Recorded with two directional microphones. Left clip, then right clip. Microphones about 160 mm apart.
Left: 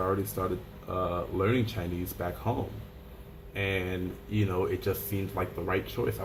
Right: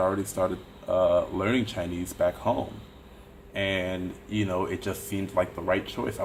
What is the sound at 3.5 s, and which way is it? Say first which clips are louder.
Speech: right 3 dB; 50° right (ahead or behind).